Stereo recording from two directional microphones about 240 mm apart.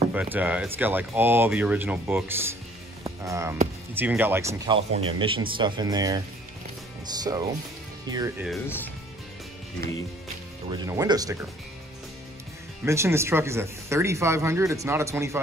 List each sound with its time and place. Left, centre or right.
0.1 s speech: centre
8.5 s speech: centre
10.7 s speech: centre
12.8 s speech: centre